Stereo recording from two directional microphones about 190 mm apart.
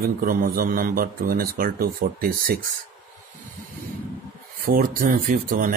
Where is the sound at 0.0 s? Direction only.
50° right (ahead or behind).